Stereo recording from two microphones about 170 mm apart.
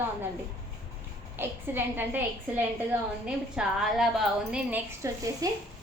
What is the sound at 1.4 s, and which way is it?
Speech, 10° right (ahead or behind).